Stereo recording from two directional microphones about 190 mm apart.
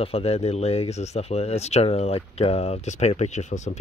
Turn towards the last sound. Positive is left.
turn(degrees=40)  # may be behind; listen again after turning